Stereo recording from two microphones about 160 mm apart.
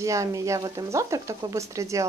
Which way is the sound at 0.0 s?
20° right (ahead or behind).